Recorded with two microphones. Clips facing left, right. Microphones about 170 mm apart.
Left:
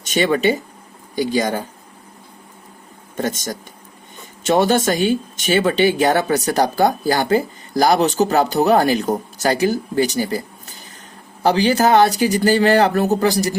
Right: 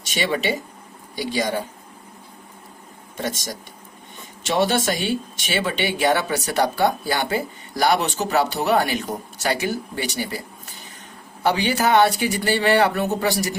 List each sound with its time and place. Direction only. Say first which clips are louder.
0.1 s speech: left 6 dB; 45° left (ahead or behind)
3.2 s speech: left 5 dB; 45° left (ahead or behind)
11.4 s speech: left 5 dB; 40° left (ahead or behind)